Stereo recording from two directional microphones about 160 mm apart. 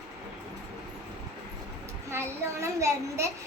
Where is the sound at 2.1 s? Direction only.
15° right (ahead or behind).